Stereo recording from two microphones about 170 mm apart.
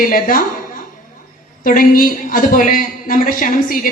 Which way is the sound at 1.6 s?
55° left (ahead or behind).